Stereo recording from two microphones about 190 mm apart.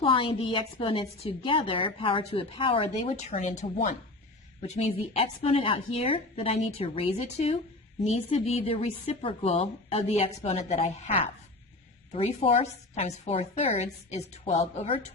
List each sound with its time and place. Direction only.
0.0 s a woman's voice: 30° left (ahead or behind)